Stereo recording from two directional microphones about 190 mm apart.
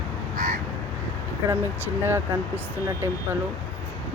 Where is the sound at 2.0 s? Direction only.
10° right (ahead or behind).